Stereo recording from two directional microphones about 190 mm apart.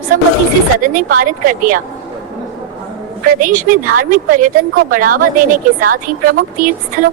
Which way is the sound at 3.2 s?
45° right (ahead or behind).